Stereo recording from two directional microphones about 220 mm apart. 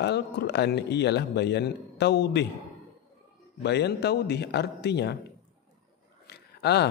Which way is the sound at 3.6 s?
50° left (ahead or behind).